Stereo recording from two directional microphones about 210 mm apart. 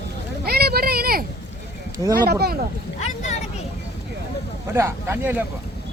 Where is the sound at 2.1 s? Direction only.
50° right (ahead or behind).